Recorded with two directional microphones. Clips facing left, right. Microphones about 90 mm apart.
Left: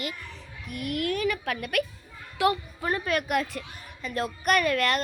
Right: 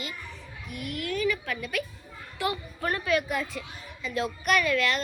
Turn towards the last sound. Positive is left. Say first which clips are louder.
# left 1 dB
turn(degrees=50)  # may be behind; listen again after turning